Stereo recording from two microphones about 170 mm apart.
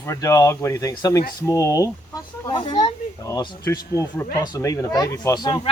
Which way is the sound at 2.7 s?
25° left (ahead or behind).